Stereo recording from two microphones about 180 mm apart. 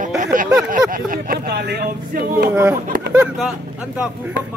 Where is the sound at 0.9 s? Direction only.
50° right (ahead or behind).